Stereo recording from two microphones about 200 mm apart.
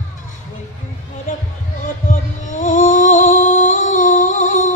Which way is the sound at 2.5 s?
40° left (ahead or behind).